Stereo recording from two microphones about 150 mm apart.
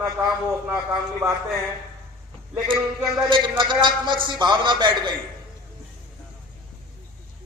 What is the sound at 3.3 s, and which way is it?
A man's voice, 35° right (ahead or behind).